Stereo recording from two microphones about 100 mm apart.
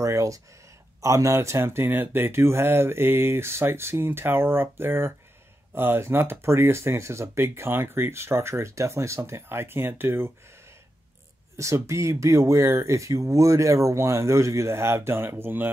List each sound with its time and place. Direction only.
0.0 s speech: 35° right (ahead or behind)
11.5 s speech: 30° right (ahead or behind)